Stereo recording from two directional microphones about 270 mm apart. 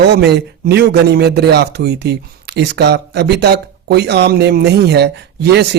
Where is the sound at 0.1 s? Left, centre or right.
Right.